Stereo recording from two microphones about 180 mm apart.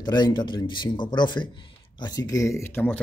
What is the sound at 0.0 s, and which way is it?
Speech, 25° left (ahead or behind).